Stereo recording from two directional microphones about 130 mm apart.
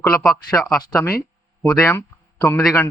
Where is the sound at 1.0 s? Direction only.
20° left (ahead or behind).